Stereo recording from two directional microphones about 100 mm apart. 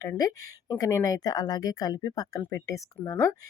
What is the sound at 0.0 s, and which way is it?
Speech, 35° left (ahead or behind).